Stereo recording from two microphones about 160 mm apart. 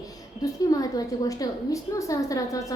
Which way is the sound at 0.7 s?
20° left (ahead or behind).